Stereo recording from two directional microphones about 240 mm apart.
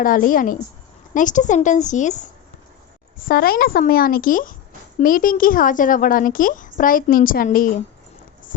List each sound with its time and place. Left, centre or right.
0.0 s speech: left